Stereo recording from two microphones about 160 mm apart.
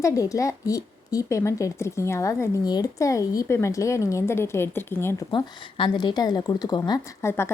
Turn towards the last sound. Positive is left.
turn(degrees=15)  # may be behind; listen again after turning